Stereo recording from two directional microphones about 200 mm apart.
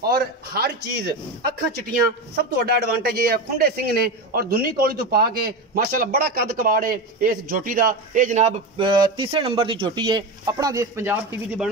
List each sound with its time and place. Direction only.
0.0 s a man's voice: 50° right (ahead or behind); by 11.7 s 10° right (ahead or behind)